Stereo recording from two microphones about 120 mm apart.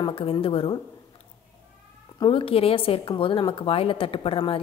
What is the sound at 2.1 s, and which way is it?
Speech, 45° left (ahead or behind).